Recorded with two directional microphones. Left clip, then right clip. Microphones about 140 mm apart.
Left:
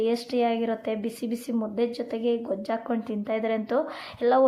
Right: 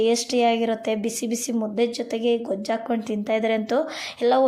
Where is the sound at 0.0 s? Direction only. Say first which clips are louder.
Right 5 dB; 25° right (ahead or behind).